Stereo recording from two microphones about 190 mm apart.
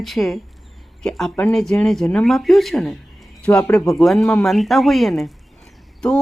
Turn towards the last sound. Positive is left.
turn(degrees=5)  # may be behind; listen again after turning